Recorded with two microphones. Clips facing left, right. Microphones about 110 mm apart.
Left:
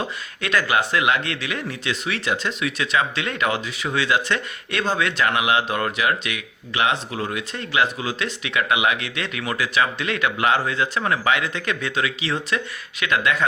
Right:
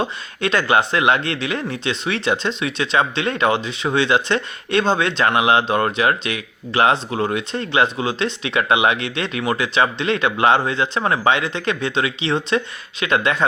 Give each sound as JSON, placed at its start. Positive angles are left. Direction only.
{"t": 0.0, "sound": "speech", "side_deg": -30}